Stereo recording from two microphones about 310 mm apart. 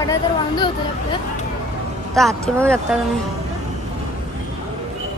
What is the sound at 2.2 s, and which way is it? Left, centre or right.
Speech, centre.